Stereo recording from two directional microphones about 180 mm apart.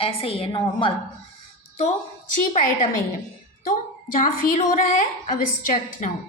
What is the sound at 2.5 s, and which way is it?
A woman's voice, 45° left (ahead or behind).